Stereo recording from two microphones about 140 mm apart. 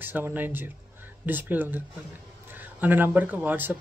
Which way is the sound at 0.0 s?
15° right (ahead or behind).